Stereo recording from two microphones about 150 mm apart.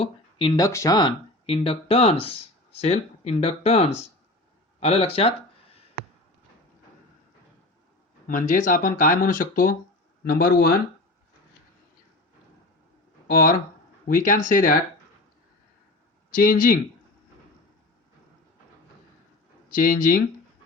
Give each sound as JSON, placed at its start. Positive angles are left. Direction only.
{"t": 0.0, "sound": "speech", "side_deg": 35}
{"t": 8.3, "sound": "speech", "side_deg": 60}
{"t": 10.2, "sound": "speech", "side_deg": 85}
{"t": 13.2, "sound": "speech", "side_deg": 75}
{"t": 14.1, "sound": "speech", "side_deg": 60}
{"t": 16.3, "sound": "speech", "side_deg": 70}
{"t": 19.6, "sound": "speech", "side_deg": 70}